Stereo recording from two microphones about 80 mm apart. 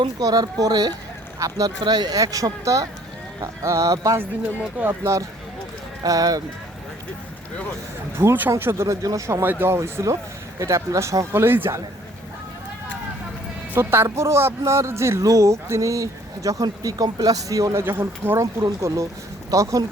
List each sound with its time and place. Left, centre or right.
0.2 s a man's voice: right
6.0 s speech: right
8.2 s speech: right
8.9 s speech: right
11.3 s speech: right
13.7 s a man's voice: right
17.8 s speech: right
18.8 s a man's voice: right